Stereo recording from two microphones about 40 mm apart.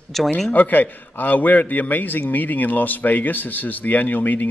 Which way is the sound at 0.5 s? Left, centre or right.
Left.